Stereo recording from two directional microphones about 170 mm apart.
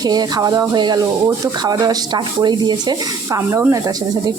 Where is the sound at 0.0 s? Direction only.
25° right (ahead or behind).